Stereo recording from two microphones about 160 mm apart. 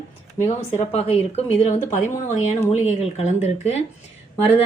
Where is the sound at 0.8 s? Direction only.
40° left (ahead or behind).